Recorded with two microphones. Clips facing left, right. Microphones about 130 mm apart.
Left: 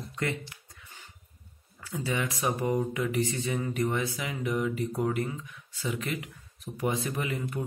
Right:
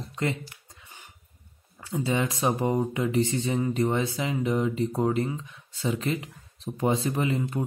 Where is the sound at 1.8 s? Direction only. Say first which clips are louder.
Right 5 dB; 25° right (ahead or behind).